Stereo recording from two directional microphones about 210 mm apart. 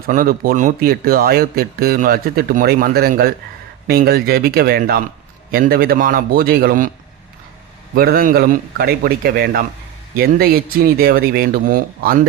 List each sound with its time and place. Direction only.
0.1 s speech: 45° right (ahead or behind)
7.9 s speech: 45° right (ahead or behind)